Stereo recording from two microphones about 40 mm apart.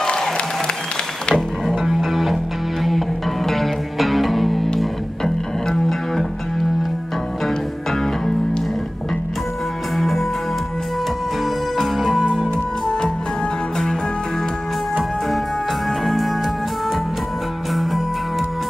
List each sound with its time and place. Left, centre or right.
0.0 s music: centre
1.3 s music: centre
1.9 s music: centre
3.4 s music: centre
9.9 s music: centre
11.8 s music: centre
12.4 s music: centre